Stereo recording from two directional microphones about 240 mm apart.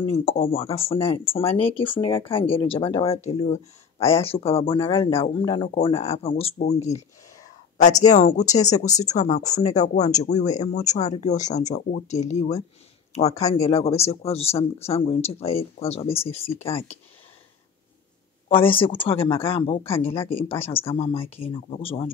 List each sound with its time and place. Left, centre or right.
0.1 s speech: left
8.1 s speech: left
18.5 s speech: left